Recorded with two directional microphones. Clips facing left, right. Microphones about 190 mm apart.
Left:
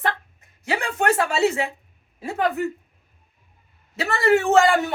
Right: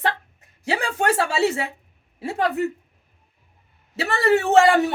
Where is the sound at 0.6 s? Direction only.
35° right (ahead or behind).